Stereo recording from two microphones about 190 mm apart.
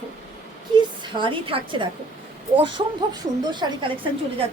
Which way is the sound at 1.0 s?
25° right (ahead or behind).